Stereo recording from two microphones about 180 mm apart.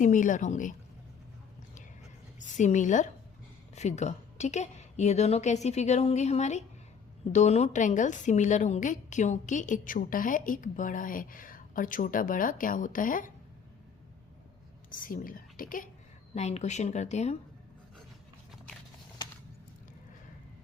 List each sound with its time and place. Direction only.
0.0 s a woman's voice: 45° left (ahead or behind)
2.6 s a woman's voice: 40° left (ahead or behind)
14.8 s a woman's voice: 50° left (ahead or behind)
16.3 s a woman's voice: 40° left (ahead or behind)